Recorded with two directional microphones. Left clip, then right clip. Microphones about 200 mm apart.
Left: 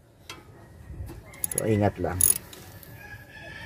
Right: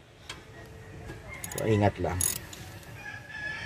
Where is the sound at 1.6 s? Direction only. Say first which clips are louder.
Left 1 dB; 30° left (ahead or behind).